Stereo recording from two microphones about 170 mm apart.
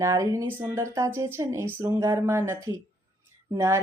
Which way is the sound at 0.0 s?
20° right (ahead or behind).